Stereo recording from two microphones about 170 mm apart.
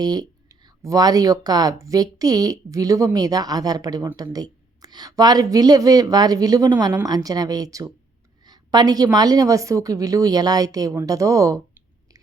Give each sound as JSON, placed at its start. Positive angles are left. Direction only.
{"t": 0.0, "sound": "speech", "side_deg": -25}